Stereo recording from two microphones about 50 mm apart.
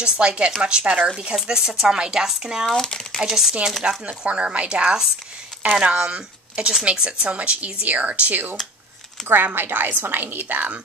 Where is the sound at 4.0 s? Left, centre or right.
Right.